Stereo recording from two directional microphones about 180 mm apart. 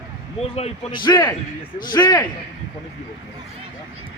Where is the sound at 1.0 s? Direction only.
25° left (ahead or behind).